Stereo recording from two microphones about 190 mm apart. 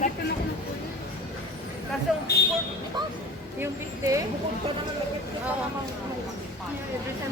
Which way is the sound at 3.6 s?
15° right (ahead or behind).